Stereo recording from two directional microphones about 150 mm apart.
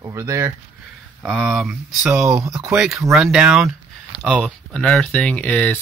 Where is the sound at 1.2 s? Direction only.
5° right (ahead or behind).